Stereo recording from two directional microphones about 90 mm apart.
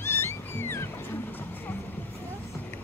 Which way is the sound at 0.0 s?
25° left (ahead or behind).